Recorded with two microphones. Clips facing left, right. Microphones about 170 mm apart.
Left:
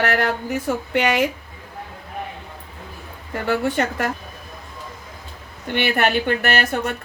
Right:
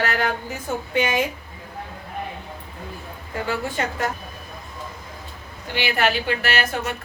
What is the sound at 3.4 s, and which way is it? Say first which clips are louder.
Speech: left 5 dB; 60° left (ahead or behind).